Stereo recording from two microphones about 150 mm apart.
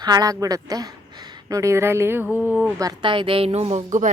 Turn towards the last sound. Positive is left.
turn(degrees=-50)  # may be behind; listen again after turning